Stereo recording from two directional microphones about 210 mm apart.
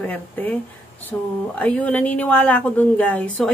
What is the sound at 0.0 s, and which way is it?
A woman's voice, 5° left (ahead or behind).